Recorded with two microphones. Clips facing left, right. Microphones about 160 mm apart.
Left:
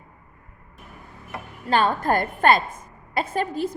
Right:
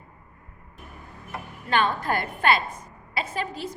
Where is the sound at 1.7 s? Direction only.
40° left (ahead or behind).